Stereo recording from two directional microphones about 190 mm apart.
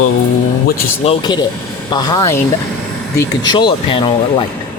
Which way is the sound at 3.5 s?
25° left (ahead or behind).